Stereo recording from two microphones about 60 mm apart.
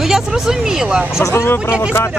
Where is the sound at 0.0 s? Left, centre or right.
Centre.